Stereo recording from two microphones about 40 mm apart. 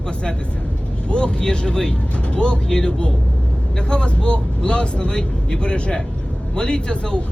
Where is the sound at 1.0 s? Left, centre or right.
Left.